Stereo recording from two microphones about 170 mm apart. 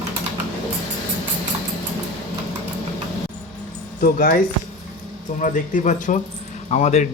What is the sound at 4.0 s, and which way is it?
A man's voice, 60° left (ahead or behind).